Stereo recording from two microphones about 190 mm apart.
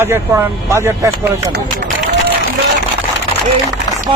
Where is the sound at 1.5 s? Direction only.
55° right (ahead or behind).